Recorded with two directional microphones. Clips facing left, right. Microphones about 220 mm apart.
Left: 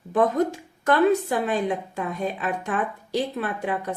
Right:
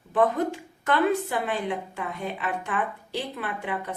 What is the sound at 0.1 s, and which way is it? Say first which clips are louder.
A woman's voice: left 2 dB; 40° left (ahead or behind).